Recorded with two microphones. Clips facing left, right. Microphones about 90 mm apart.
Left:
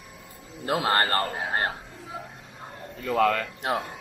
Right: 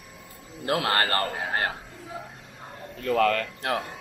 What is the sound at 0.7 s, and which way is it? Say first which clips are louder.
Speech: left 1 dB; centre (ahead or behind).